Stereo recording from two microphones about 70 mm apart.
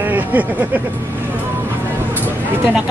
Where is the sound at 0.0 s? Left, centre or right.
Right.